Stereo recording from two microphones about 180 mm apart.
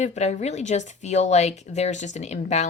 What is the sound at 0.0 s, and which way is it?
Speech, 40° left (ahead or behind).